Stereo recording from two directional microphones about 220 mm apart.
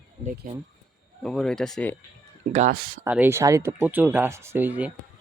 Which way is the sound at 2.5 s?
35° right (ahead or behind).